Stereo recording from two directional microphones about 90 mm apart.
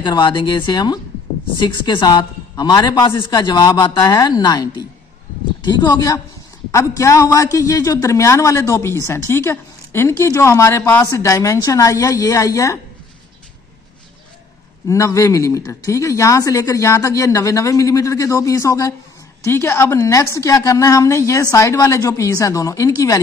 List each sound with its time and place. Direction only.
0.0 s a woman's voice: 55° left (ahead or behind)
5.9 s a man's voice: 40° left (ahead or behind)
14.9 s a man's voice: 35° left (ahead or behind)